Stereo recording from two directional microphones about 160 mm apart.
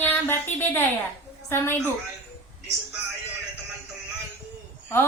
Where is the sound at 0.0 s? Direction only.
15° left (ahead or behind).